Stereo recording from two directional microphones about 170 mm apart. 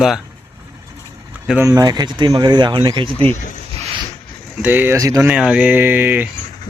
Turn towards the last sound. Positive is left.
turn(degrees=-10)  # may be behind; listen again after turning